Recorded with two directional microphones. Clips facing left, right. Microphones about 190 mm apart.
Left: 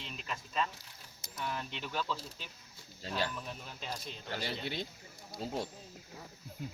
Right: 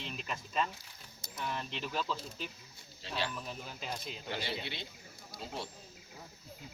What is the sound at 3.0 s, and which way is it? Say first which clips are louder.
Speech: left 2 dB; 40° left (ahead or behind).